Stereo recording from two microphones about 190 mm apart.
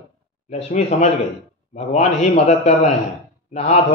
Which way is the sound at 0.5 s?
35° left (ahead or behind).